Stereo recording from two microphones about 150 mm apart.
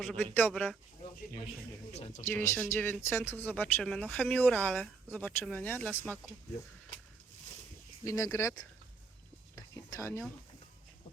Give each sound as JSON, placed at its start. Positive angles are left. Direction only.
{"t": 0.0, "sound": "speech", "side_deg": 10}
{"t": 1.9, "sound": "speech", "side_deg": 50}
{"t": 2.3, "sound": "speech", "side_deg": 15}
{"t": 8.0, "sound": "speech", "side_deg": 20}
{"t": 9.6, "sound": "whispering", "side_deg": 20}